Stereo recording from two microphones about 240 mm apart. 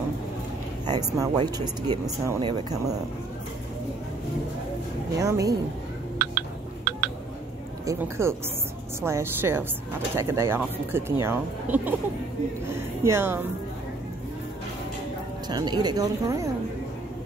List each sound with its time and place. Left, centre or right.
0.8 s speech: centre
5.1 s speech: centre
7.8 s speech: centre
15.4 s speech: centre